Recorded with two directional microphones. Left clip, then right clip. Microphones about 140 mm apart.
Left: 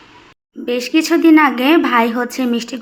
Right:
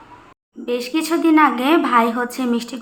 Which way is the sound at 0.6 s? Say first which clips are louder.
Left 5 dB; 35° left (ahead or behind).